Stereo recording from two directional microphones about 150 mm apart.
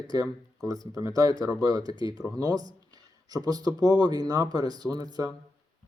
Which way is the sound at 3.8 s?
25° right (ahead or behind).